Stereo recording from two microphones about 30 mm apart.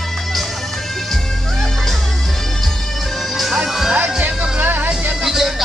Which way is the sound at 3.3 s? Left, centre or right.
Centre.